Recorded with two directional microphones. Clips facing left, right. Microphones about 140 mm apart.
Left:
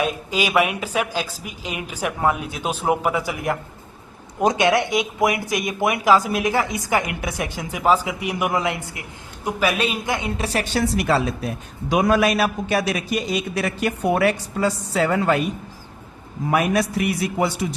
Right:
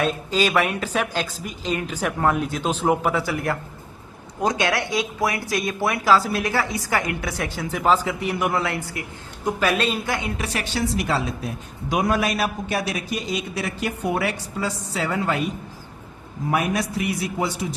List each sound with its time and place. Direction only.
0.0 s a woman's voice: 10° left (ahead or behind)
10.4 s a woman's voice: 35° left (ahead or behind)
10.8 s speech: 65° left (ahead or behind)
11.9 s a man's voice: 85° left; by 15.4 s 55° left (ahead or behind)
16.5 s a man's voice: 75° left (ahead or behind)